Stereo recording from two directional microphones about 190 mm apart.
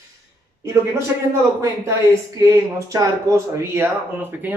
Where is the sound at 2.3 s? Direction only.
15° right (ahead or behind).